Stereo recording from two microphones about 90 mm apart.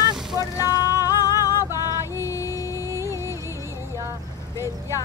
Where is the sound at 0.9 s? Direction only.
40° left (ahead or behind).